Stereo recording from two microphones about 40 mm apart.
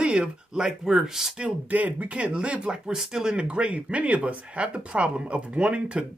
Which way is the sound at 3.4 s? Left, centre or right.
Right.